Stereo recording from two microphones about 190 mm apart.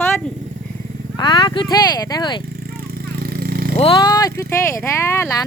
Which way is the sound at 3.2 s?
50° right (ahead or behind).